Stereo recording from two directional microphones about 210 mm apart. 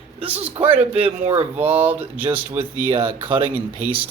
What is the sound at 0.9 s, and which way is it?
Speech, 30° right (ahead or behind).